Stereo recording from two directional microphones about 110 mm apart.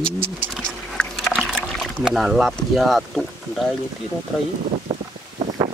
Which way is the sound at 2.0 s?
Centre (ahead or behind).